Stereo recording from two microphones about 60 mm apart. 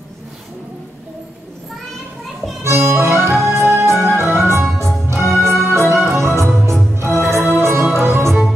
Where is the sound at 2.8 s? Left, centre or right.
Right.